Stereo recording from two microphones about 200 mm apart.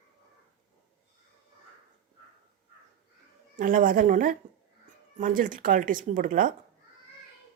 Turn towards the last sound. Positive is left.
turn(degrees=-40)  # may be behind; listen again after turning